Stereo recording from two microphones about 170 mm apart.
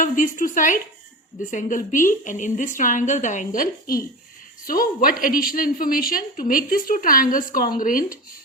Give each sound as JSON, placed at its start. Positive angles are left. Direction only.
{"t": 0.0, "sound": "a woman's voice", "side_deg": 50}